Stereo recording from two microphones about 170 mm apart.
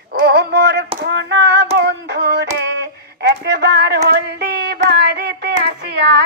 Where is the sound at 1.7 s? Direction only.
80° right.